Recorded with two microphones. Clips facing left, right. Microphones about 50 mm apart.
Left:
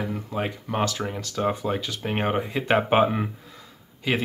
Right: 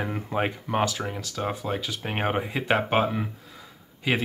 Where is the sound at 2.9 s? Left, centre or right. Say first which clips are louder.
Left 4 dB; centre.